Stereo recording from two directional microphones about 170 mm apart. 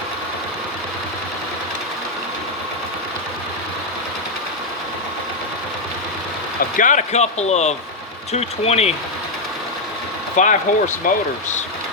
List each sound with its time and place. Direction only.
6.6 s speech: 50° left (ahead or behind)
10.3 s speech: 45° left (ahead or behind)